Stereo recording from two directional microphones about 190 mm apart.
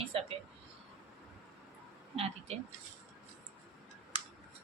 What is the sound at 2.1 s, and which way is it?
Speech, 30° right (ahead or behind).